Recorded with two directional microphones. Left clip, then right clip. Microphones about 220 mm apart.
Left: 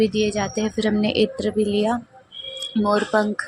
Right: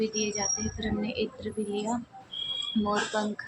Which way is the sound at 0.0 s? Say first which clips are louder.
Left 9 dB; 30° left (ahead or behind).